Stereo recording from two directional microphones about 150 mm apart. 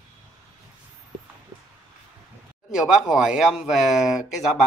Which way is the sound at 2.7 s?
5° right (ahead or behind).